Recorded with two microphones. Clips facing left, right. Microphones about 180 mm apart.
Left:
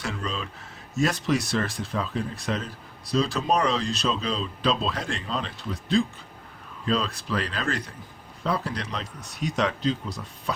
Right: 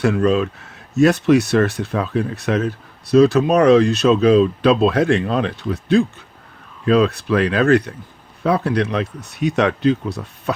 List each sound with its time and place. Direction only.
0.0 s speech: 60° right (ahead or behind)